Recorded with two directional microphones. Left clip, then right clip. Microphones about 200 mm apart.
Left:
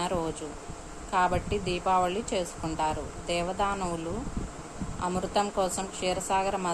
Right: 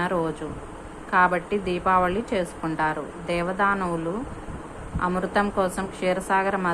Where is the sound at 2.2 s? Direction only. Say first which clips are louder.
Right 5 dB; 10° right (ahead or behind).